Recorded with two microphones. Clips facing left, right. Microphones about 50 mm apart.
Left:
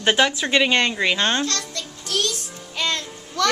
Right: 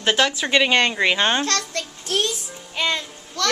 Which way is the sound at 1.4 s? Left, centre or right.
Right.